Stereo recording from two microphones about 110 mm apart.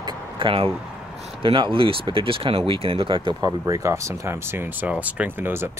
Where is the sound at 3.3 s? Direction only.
35° right (ahead or behind).